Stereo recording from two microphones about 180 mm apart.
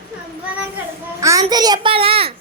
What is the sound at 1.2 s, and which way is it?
A woman's voice, 20° right (ahead or behind).